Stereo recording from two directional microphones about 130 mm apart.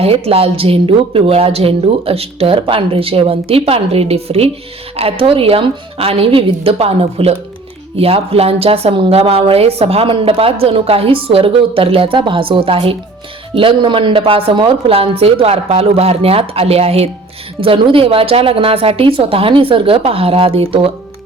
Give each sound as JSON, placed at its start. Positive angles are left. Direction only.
{"t": 0.0, "sound": "speech", "side_deg": -50}